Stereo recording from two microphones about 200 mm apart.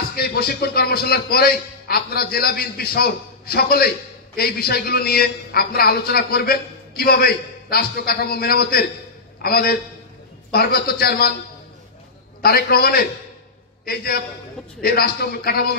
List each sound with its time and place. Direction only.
0.1 s a man's voice: 50° left (ahead or behind)
12.4 s a man's voice: 50° left (ahead or behind)